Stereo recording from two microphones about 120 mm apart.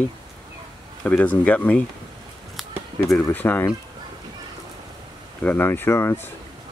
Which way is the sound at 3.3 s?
15° left (ahead or behind).